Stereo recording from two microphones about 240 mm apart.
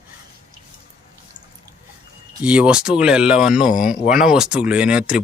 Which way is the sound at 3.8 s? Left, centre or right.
Left.